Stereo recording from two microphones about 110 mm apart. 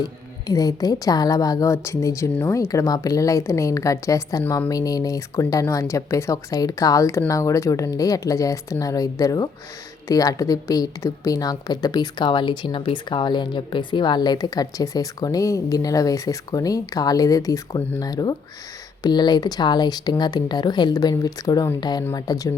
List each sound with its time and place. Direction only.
0.0 s a woman's voice: 35° left (ahead or behind)